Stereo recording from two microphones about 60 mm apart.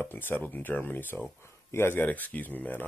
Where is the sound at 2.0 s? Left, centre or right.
Left.